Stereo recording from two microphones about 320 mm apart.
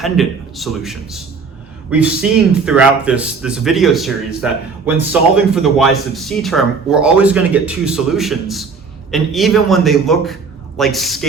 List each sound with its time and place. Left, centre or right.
0.0 s speech: centre
2.6 s speech: centre